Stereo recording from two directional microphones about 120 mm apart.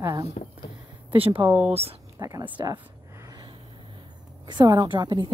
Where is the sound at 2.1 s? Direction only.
30° right (ahead or behind).